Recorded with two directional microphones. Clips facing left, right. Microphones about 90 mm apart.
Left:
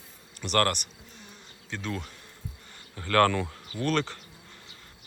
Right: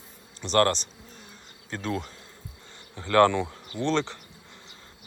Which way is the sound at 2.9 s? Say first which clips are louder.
Right 3 dB; 20° right (ahead or behind).